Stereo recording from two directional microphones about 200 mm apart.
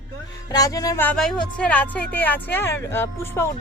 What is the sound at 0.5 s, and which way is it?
Speech, 20° left (ahead or behind).